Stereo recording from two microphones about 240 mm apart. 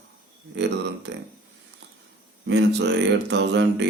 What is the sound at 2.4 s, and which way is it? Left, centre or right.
Speech, right.